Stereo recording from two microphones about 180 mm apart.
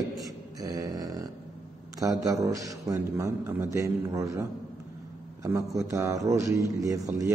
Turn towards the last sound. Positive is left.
turn(degrees=-20)  # may be behind; listen again after turning